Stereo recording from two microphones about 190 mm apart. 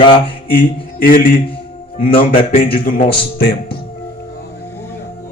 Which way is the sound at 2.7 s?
45° left (ahead or behind).